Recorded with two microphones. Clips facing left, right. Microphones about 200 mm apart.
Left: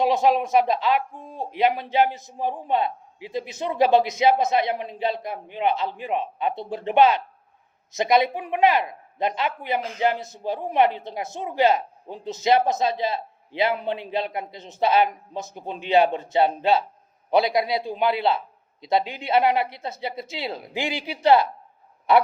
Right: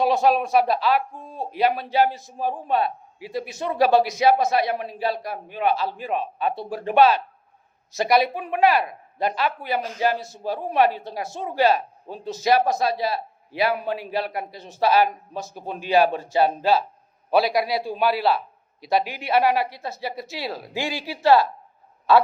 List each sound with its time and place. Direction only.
0.0 s a man's voice: 20° left (ahead or behind)